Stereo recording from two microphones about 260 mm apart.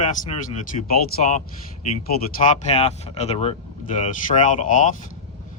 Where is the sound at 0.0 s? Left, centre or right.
Left.